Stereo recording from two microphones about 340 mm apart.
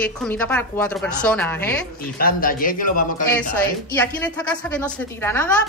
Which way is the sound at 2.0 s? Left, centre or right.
Left.